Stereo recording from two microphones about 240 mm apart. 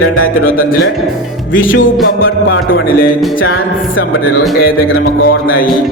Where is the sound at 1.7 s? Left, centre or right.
Left.